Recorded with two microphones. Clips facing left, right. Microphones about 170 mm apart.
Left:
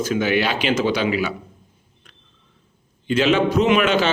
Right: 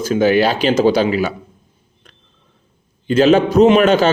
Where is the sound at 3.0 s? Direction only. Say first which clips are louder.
Right 6 dB; 40° right (ahead or behind).